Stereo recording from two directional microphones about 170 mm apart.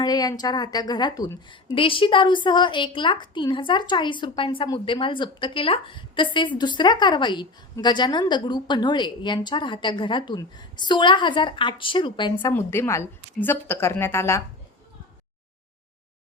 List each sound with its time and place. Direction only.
0.0 s a woman's voice: 20° left (ahead or behind)
12.5 s speech: 15° left (ahead or behind)